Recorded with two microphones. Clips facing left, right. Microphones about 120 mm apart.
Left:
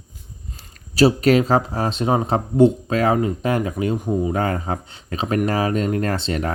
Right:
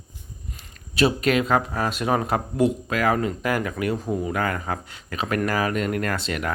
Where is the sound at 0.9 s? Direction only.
35° left (ahead or behind).